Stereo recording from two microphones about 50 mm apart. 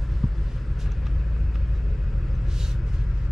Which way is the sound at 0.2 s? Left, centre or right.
Centre.